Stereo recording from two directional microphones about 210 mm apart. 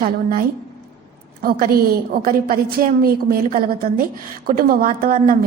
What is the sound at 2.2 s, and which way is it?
A woman's voice, 45° right (ahead or behind).